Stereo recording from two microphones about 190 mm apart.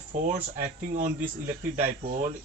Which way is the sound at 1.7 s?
40° right (ahead or behind).